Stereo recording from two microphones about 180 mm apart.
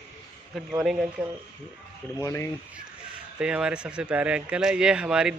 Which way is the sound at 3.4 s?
5° right (ahead or behind).